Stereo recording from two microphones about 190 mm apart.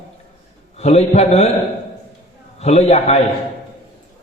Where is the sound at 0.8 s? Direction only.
35° left (ahead or behind).